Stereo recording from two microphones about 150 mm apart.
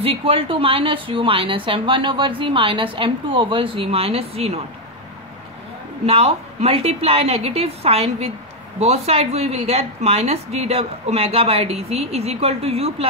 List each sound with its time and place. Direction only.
0.0 s a woman's voice: 40° right (ahead or behind)
6.0 s a woman's voice: 40° right (ahead or behind)